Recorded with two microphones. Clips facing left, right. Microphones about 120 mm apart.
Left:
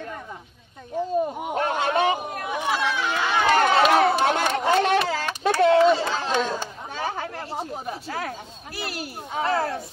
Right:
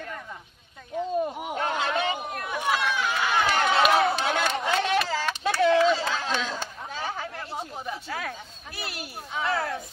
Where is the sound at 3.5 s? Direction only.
60° left (ahead or behind).